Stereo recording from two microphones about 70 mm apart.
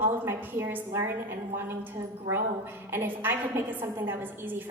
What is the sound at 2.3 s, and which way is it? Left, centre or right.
A woman's voice, right.